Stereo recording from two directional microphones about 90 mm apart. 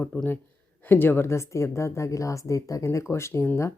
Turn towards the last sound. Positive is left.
turn(degrees=30)  # may be behind; listen again after turning